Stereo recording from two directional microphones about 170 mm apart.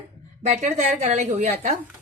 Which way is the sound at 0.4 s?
45° right (ahead or behind).